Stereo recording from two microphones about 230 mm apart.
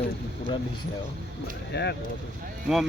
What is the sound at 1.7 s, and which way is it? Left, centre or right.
Speech, left.